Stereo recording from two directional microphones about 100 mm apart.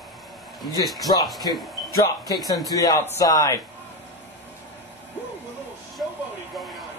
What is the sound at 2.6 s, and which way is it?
Speech, 35° left (ahead or behind).